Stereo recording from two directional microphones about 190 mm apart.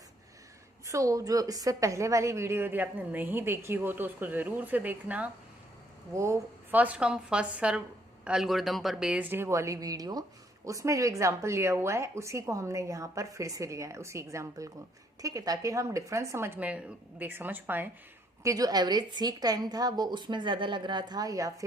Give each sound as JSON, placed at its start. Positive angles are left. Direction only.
{"t": 0.9, "sound": "a woman's voice", "side_deg": -15}